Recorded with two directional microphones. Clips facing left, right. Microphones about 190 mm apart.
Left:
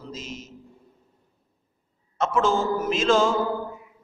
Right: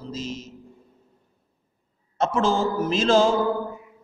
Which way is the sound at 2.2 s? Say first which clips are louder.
Right 1 dB; 35° right (ahead or behind).